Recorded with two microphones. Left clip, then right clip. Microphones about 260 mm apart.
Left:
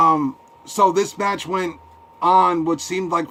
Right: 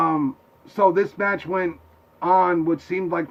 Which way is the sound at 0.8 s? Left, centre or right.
Centre.